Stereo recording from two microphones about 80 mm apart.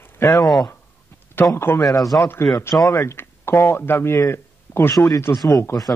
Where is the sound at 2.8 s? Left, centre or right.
Left.